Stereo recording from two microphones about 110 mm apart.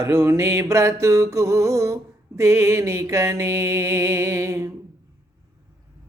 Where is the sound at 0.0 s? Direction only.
25° right (ahead or behind).